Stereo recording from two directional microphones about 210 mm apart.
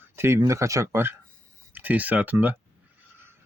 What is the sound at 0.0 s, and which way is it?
Speech, 10° right (ahead or behind).